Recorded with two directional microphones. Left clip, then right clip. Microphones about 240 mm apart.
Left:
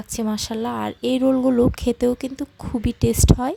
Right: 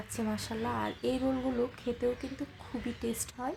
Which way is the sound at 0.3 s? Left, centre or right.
Left.